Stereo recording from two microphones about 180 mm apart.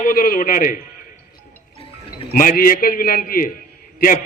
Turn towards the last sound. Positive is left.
turn(degrees=50)  # may be behind; listen again after turning